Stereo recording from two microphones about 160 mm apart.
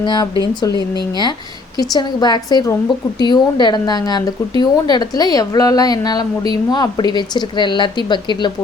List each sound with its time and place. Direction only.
0.0 s a woman's voice: 25° left (ahead or behind)